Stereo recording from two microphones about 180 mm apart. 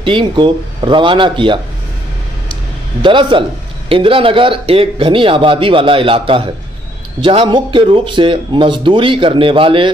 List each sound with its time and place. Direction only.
0.0 s speech: 30° right (ahead or behind)
3.0 s speech: 25° right (ahead or behind)